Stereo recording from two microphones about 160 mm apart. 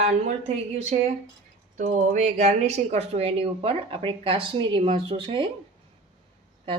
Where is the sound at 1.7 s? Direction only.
50° right (ahead or behind); by 5.5 s 35° right (ahead or behind).